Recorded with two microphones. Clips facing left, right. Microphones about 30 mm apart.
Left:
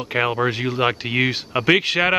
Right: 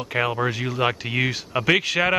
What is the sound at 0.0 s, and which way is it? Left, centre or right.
Speech, centre.